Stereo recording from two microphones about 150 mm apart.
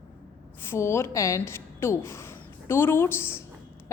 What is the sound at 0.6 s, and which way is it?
A woman's voice, 15° left (ahead or behind).